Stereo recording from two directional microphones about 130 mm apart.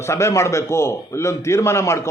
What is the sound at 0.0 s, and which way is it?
A man's voice, 20° left (ahead or behind).